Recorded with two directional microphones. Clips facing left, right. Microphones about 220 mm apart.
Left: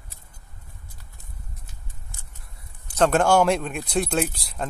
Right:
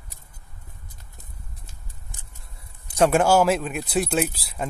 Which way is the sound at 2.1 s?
20° right (ahead or behind).